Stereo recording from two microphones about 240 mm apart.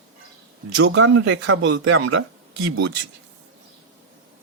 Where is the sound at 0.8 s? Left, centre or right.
Right.